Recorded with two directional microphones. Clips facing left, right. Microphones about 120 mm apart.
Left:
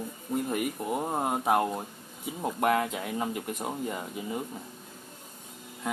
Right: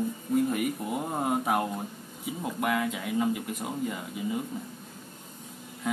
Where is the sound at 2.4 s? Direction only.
35° left (ahead or behind).